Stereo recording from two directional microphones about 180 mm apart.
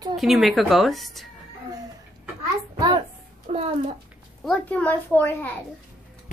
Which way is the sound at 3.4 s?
35° right (ahead or behind).